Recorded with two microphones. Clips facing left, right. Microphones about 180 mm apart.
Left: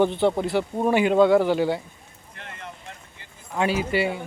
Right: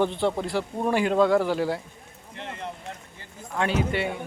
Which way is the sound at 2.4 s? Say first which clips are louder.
Right 5 dB; 25° right (ahead or behind).